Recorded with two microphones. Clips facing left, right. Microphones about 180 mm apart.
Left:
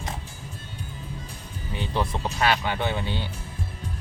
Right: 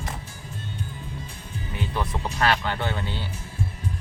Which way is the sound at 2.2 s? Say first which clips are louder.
Right 2 dB; 5° left (ahead or behind).